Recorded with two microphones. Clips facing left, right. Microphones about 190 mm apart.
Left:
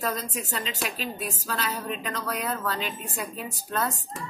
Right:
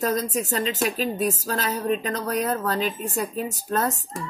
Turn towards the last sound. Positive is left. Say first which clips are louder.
# right 5 dB
turn(degrees=-40)  # may be behind; listen again after turning